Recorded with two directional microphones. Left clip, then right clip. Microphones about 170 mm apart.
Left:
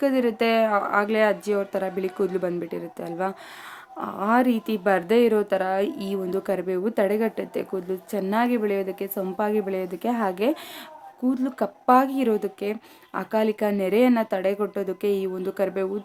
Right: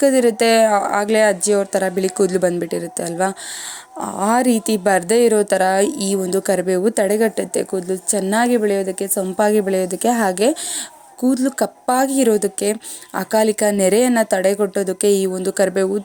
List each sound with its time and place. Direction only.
0.0 s a woman's voice: 25° right (ahead or behind)